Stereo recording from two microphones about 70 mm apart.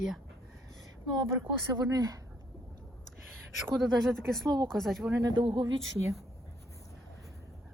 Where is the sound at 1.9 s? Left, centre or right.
Right.